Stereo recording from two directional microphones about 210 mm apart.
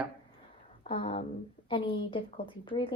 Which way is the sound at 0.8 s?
25° left (ahead or behind).